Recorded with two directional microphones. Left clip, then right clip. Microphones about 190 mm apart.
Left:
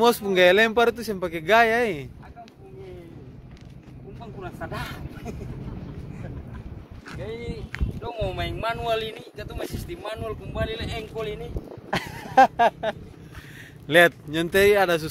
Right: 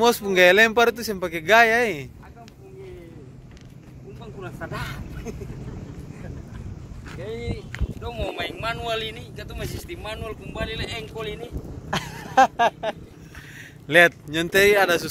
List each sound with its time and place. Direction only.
0.0 s speech: 10° left (ahead or behind)
0.3 s a man's voice: centre (ahead or behind)
4.4 s vehicle: 50° left (ahead or behind)
7.2 s a sound: 60° left (ahead or behind)
8.0 s speech: 35° left (ahead or behind)
11.9 s a sound: 20° left (ahead or behind)
13.8 s speech: 15° left (ahead or behind)